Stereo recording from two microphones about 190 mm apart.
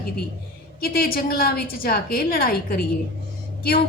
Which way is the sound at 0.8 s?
50° left (ahead or behind).